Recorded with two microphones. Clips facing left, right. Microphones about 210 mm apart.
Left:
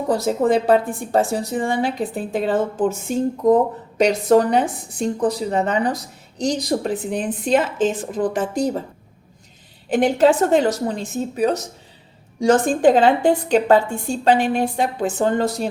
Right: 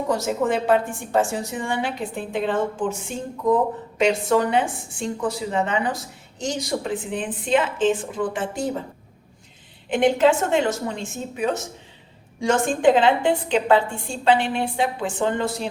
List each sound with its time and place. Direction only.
0.1 s a woman's voice: 35° left (ahead or behind)
9.9 s a woman's voice: 40° left (ahead or behind)